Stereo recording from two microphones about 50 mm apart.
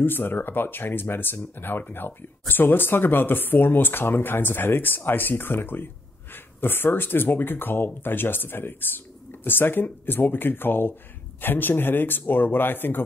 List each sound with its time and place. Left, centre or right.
0.0 s speech: left